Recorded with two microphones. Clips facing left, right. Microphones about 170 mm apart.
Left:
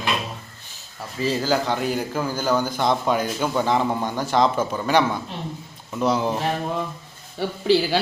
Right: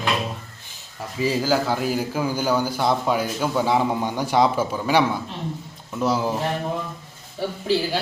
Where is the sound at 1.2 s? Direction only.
10° right (ahead or behind).